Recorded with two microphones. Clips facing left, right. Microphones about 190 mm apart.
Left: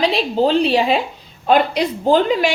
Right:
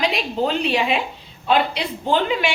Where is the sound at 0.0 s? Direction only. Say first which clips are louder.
Left 5 dB; 30° left (ahead or behind).